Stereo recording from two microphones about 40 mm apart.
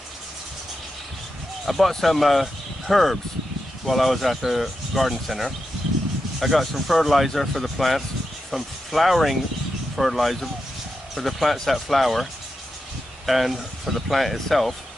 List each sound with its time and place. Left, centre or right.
1.7 s speech: centre
2.4 s a sound: centre
3.8 s speech: centre
6.4 s speech: centre